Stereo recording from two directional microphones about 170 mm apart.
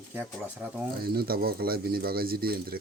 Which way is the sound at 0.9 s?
65° right (ahead or behind).